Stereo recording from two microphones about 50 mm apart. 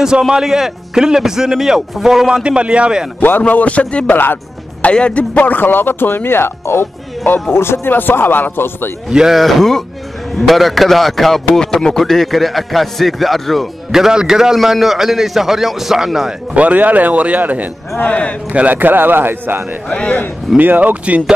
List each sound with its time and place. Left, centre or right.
0.2 s a man's voice: centre
2.4 s a man's voice: right
3.2 s a man's voice: left
7.9 s speech: left
9.1 s a man's voice: centre
9.4 s a man's voice: centre
13.9 s a man's voice: centre
16.5 s speech: right
18.0 s speech: left
18.5 s a man's voice: right
18.8 s speech: right
19.9 s speech: left
20.5 s speech: right